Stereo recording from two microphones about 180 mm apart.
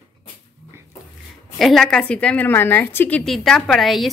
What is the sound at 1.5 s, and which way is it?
A woman's voice, centre (ahead or behind).